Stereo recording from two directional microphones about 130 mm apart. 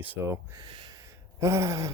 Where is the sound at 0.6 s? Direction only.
35° right (ahead or behind).